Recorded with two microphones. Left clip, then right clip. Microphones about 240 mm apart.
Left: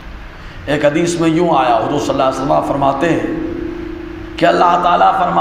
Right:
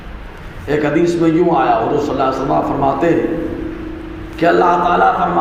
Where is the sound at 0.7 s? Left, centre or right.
Left.